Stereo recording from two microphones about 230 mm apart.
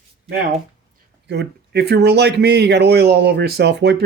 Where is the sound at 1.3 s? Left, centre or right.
Right.